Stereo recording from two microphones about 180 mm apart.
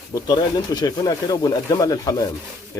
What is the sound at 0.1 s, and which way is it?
Speech, 20° left (ahead or behind).